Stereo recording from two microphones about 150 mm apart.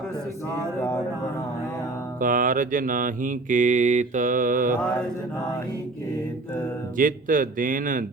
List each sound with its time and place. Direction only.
2.2 s mantra: 65° right (ahead or behind)
6.9 s mantra: 65° right (ahead or behind)